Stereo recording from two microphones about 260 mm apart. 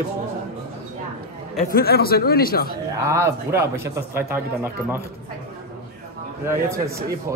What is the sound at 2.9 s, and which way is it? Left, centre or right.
A man's voice, centre.